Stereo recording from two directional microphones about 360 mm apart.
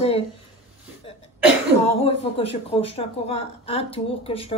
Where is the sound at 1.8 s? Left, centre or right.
Centre.